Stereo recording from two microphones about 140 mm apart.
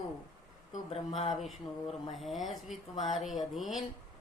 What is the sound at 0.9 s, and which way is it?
Speech, 50° left (ahead or behind).